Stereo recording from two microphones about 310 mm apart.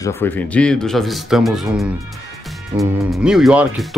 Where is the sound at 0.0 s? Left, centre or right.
Centre.